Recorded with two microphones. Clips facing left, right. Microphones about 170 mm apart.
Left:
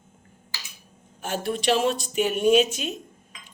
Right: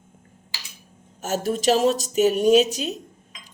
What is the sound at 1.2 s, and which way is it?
Speech, 40° right (ahead or behind).